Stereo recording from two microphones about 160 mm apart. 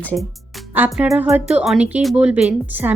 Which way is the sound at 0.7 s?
10° right (ahead or behind).